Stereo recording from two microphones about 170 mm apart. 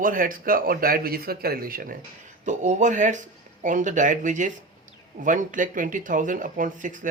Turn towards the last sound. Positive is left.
turn(degrees=-50)  # may be behind; listen again after turning